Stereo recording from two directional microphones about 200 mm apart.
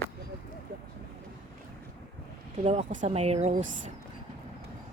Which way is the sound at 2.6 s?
35° right (ahead or behind).